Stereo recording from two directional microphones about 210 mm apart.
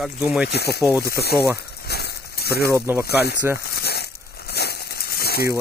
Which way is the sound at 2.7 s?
10° right (ahead or behind).